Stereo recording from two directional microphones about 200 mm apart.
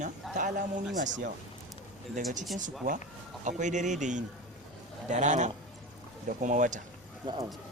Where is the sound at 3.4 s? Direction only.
40° right (ahead or behind).